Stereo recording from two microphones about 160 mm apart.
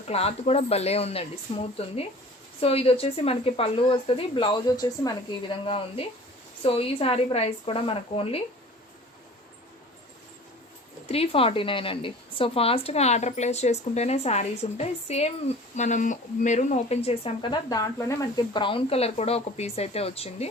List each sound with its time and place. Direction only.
0.1 s speech: 40° left (ahead or behind)
11.0 s speech: 40° left (ahead or behind)